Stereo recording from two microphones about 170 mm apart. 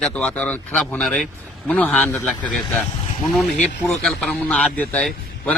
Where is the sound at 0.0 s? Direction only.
5° left (ahead or behind).